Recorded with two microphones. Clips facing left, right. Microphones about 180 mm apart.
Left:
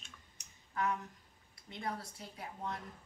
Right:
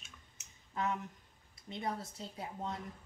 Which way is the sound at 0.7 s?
25° right (ahead or behind).